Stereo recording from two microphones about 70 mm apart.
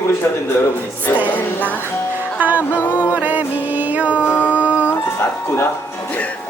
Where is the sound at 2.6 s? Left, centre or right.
Left.